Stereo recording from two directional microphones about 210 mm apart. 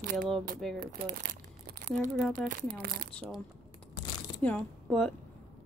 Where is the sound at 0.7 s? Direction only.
40° right (ahead or behind).